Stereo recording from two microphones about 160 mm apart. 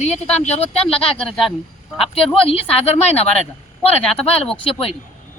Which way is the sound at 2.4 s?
35° left (ahead or behind).